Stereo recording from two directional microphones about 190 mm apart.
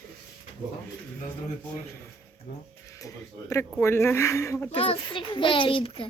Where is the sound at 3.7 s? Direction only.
15° left (ahead or behind).